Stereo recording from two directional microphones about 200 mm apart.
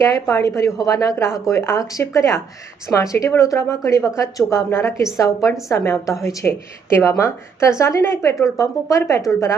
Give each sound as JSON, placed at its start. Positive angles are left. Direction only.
{"t": 0.0, "sound": "a woman's voice", "side_deg": 15}